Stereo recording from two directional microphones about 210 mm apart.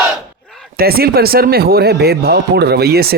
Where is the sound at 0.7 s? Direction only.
45° right (ahead or behind).